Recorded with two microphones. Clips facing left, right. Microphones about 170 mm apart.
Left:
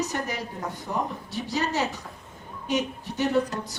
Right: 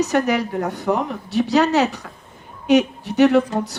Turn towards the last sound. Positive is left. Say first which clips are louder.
# right 9 dB
turn(degrees=-75)  # may be behind; listen again after turning